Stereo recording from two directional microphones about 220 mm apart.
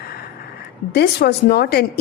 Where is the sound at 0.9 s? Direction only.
45° left (ahead or behind).